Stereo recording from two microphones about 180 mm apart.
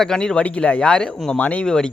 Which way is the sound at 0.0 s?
5° left (ahead or behind).